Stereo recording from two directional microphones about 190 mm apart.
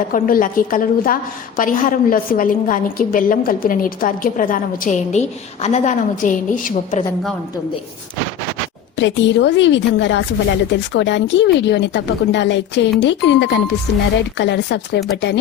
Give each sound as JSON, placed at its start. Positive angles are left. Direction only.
{"t": 0.1, "sound": "a woman's voice", "side_deg": 45}
{"t": 9.0, "sound": "speech", "side_deg": 75}